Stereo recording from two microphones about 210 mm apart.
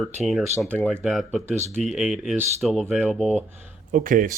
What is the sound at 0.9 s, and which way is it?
Speech, 5° right (ahead or behind).